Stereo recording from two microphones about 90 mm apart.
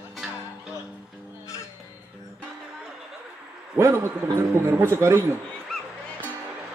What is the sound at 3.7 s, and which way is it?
A man's voice, 30° right (ahead or behind).